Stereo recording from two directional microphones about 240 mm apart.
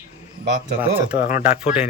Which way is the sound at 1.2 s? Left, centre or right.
Left.